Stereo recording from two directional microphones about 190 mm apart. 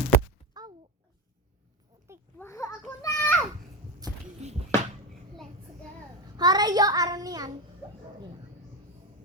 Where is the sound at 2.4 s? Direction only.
15° left (ahead or behind).